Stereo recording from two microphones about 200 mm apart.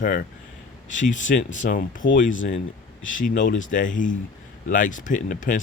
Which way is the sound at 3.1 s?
40° left (ahead or behind).